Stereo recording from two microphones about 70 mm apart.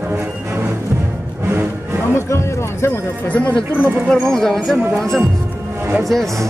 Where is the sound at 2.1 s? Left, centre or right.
Left.